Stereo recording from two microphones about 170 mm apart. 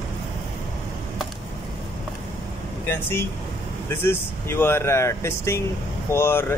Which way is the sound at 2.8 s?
15° left (ahead or behind).